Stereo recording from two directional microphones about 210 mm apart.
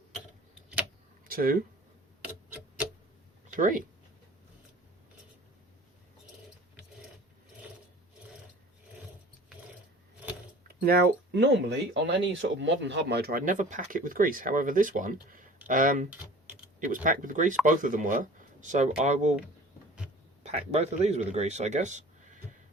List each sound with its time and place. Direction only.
1.3 s speech: 45° right (ahead or behind)
2.2 s tick-tock: 5° right (ahead or behind)
3.5 s speech: 40° right (ahead or behind)
10.8 s speech: 45° right (ahead or behind)
20.4 s speech: 30° right (ahead or behind)